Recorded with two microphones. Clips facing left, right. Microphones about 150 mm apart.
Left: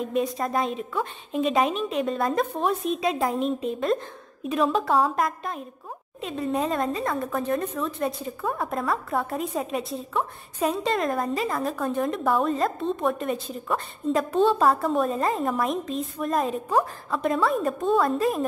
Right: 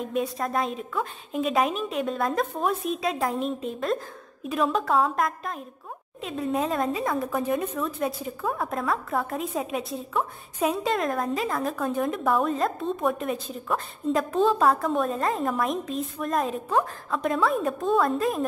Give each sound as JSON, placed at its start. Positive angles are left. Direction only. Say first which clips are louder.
{"t": 0.0, "sound": "a woman's voice", "louder": "left 2 dB", "side_deg": 0}